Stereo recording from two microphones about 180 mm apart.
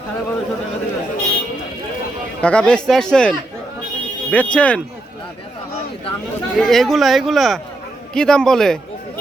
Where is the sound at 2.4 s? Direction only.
5° left (ahead or behind).